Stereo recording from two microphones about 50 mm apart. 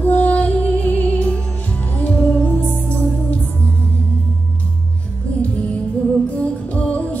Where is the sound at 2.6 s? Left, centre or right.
Right.